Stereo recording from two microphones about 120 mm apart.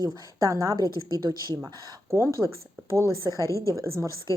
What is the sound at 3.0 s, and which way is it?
Speech, 30° right (ahead or behind).